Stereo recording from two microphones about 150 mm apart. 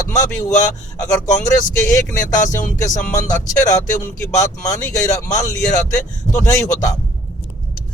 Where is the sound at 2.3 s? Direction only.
20° left (ahead or behind).